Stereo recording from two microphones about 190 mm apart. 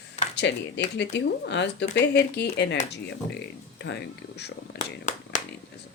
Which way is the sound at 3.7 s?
60° left (ahead or behind).